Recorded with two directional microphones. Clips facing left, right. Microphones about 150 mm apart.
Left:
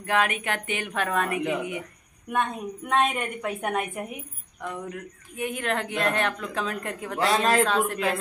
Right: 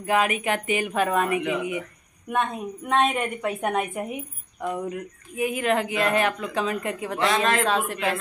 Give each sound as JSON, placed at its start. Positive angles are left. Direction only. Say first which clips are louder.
{"t": 0.0, "sound": "a woman's voice", "louder": "right 3 dB", "side_deg": -5}
{"t": 1.4, "sound": "speech", "louder": "right 1 dB", "side_deg": 40}
{"t": 2.9, "sound": "a woman's voice", "louder": "right 2 dB", "side_deg": 0}
{"t": 7.2, "sound": "speech", "louder": "left 1 dB", "side_deg": 35}
{"t": 7.6, "sound": "a woman's voice", "louder": "even", "side_deg": 0}